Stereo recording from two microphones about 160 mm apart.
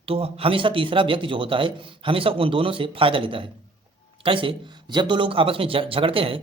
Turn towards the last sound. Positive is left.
turn(degrees=-35)  # may be behind; listen again after turning